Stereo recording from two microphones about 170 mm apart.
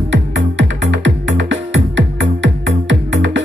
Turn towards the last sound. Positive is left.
turn(degrees=-90)